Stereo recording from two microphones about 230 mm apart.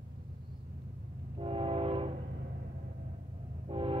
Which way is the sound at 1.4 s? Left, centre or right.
Right.